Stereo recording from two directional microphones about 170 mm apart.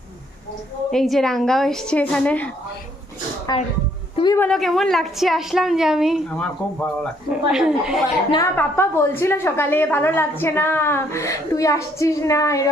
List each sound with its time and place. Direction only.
0.9 s a woman's voice: centre (ahead or behind)
3.5 s a woman's voice: 20° left (ahead or behind)
4.4 s a woman's voice: centre (ahead or behind)
8.5 s a woman's voice: 15° left (ahead or behind)